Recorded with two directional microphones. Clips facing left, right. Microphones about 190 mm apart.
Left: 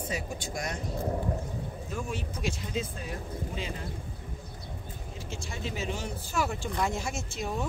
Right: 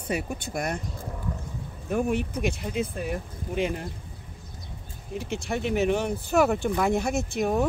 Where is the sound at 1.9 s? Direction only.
60° right (ahead or behind).